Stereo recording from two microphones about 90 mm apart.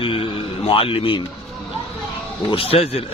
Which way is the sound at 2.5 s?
85° left.